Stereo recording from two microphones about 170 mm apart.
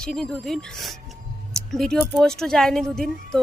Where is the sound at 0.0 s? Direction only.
5° left (ahead or behind).